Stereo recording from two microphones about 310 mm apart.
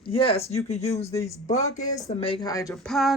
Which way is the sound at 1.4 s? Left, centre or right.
Left.